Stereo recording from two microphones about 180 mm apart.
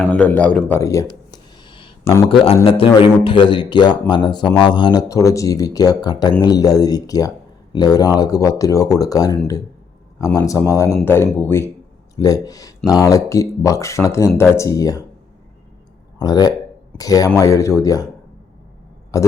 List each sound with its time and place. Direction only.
0.0 s speech: 5° left (ahead or behind)
1.3 s a sound: 25° left (ahead or behind)
2.3 s a man's voice: 30° left (ahead or behind)
16.1 s speech: 20° left (ahead or behind)
19.1 s speech: 20° left (ahead or behind)